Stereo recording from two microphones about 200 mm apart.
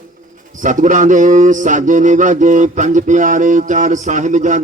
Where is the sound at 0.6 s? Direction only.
40° right (ahead or behind).